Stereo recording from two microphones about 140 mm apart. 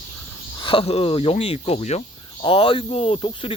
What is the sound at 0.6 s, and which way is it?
Speech, 40° left (ahead or behind).